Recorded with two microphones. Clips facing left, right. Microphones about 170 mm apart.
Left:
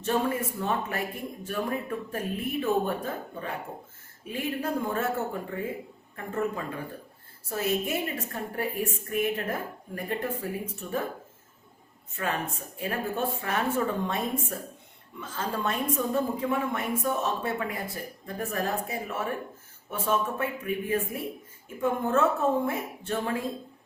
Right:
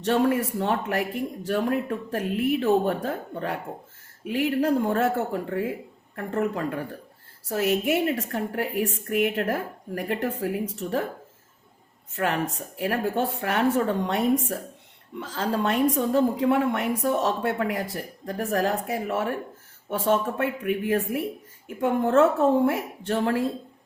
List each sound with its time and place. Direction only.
0.0 s a woman's voice: 80° right
12.1 s a woman's voice: 80° right